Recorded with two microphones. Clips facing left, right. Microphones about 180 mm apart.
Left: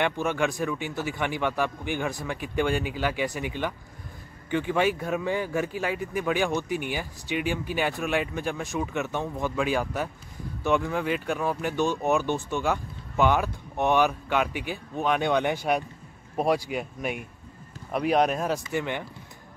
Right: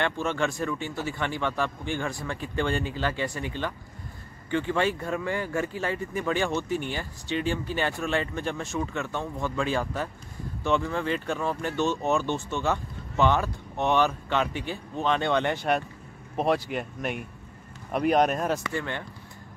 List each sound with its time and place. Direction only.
0.0 s speech: 15° left (ahead or behind)
18.7 s speech: 15° left (ahead or behind)